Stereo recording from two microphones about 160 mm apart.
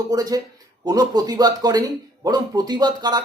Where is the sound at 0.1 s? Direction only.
25° right (ahead or behind).